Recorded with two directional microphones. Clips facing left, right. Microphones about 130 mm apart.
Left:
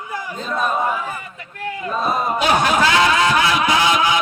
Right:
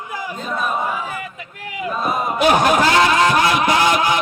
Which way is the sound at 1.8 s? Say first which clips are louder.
Even; 10° right (ahead or behind).